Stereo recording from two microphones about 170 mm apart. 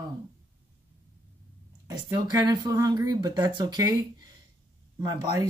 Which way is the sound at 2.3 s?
20° right (ahead or behind).